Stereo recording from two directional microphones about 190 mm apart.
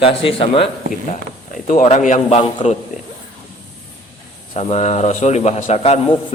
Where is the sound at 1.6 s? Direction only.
40° left (ahead or behind).